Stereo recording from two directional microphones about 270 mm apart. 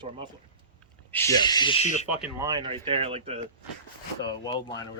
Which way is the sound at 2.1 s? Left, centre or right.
Centre.